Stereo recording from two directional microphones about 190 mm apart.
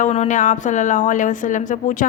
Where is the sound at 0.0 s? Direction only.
40° left (ahead or behind).